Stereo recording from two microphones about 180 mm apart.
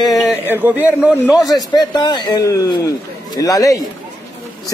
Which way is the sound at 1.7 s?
20° left (ahead or behind).